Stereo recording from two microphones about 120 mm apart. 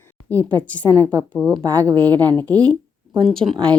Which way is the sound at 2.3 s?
15° left (ahead or behind).